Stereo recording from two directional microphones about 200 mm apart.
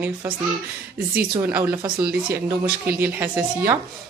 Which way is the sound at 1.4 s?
10° right (ahead or behind).